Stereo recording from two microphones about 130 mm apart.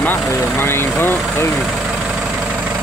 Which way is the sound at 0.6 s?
20° left (ahead or behind).